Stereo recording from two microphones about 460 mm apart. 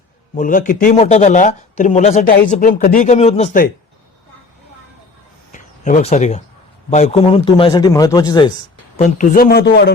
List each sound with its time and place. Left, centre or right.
0.3 s speech: centre
5.5 s a sound: centre
6.9 s speech: centre